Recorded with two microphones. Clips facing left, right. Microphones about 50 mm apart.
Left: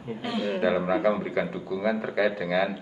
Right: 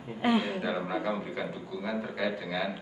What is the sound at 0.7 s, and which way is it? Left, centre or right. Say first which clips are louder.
Speech: left 8 dB; left.